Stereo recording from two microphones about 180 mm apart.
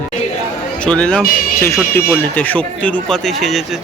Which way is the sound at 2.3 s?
10° left (ahead or behind).